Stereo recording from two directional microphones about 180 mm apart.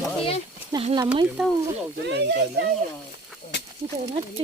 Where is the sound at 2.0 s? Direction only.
70° right (ahead or behind).